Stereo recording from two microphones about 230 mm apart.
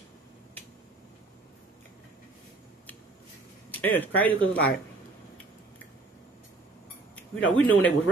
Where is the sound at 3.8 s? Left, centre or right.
Centre.